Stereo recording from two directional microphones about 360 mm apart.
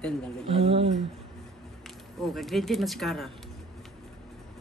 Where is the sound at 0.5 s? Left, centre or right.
Centre.